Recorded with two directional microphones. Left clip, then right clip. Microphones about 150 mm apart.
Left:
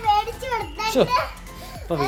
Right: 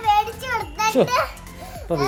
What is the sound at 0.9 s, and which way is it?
Music, 35° right (ahead or behind).